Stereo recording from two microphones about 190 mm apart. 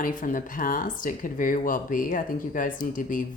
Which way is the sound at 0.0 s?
45° left (ahead or behind).